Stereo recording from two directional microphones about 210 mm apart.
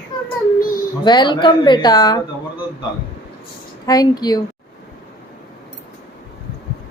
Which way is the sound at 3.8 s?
20° left (ahead or behind).